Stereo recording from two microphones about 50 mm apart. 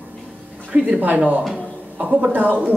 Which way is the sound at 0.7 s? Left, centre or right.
Right.